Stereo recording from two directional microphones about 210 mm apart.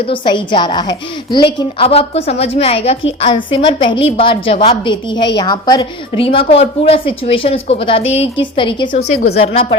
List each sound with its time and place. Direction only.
0.1 s a woman's voice: 25° left (ahead or behind)